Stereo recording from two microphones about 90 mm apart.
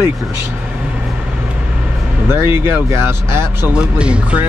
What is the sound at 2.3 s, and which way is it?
Speech, 25° right (ahead or behind).